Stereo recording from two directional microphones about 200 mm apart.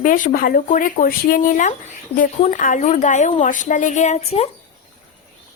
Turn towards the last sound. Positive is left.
turn(degrees=30)  # may be behind; listen again after turning